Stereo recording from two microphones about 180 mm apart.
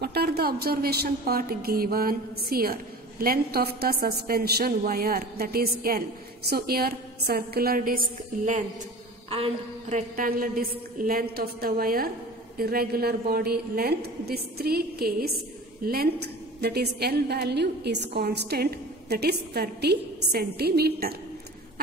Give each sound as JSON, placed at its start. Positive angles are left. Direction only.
{"t": 0.0, "sound": "a woman's voice", "side_deg": -60}
{"t": 9.3, "sound": "a woman's voice", "side_deg": -35}